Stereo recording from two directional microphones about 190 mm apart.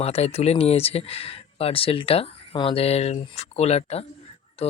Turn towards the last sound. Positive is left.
turn(degrees=30)  # may be behind; listen again after turning